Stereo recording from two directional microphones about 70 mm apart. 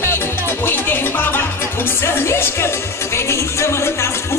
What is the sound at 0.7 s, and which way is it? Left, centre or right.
Music, left.